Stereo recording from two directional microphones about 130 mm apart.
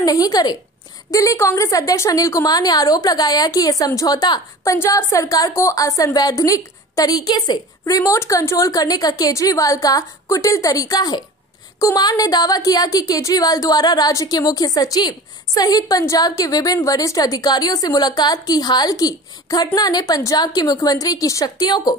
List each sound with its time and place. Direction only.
0.0 s a woman's voice: 30° left (ahead or behind)